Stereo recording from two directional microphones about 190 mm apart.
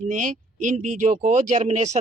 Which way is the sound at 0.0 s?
40° right (ahead or behind).